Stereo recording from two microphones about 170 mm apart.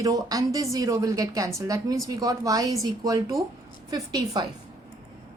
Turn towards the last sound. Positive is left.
turn(degrees=-25)  # may be behind; listen again after turning